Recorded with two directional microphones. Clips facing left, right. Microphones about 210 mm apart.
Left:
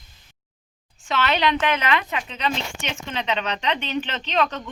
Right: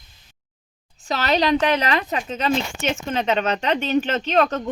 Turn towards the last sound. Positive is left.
turn(degrees=-45)  # may be behind; listen again after turning